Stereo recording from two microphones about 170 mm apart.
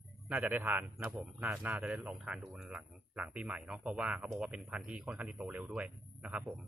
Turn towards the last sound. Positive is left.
turn(degrees=-5)  # may be behind; listen again after turning